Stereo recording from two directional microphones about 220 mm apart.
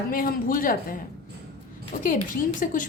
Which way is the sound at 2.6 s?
35° left (ahead or behind).